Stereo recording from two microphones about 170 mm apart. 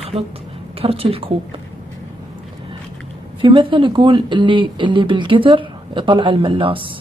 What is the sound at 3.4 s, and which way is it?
Speech, 30° right (ahead or behind).